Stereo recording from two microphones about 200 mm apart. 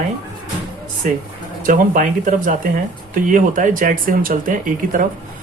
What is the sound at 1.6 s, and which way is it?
Speech, 40° right (ahead or behind).